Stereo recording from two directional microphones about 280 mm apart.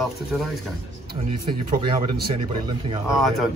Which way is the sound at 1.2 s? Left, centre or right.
Right.